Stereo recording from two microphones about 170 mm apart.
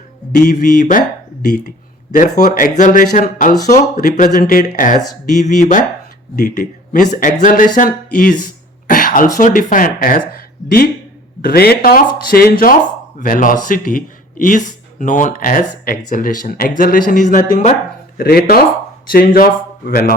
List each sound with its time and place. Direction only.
0.3 s speech: 50° left (ahead or behind)
2.7 s speech: 50° left (ahead or behind)
18.2 s speech: 65° left (ahead or behind)